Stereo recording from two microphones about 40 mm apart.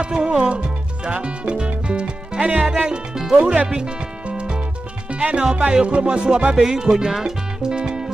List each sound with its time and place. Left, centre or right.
0.0 s music: right
2.6 s speech: centre
3.3 s speech: right
3.6 s music: centre
6.5 s speech: centre